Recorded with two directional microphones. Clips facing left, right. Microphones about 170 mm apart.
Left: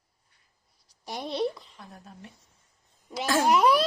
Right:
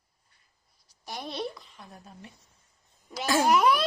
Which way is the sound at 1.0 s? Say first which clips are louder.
Left 5 dB; 25° left (ahead or behind).